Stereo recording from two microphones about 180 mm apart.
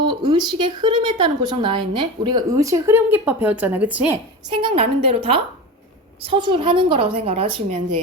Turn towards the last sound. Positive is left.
turn(degrees=-30)  # may be behind; listen again after turning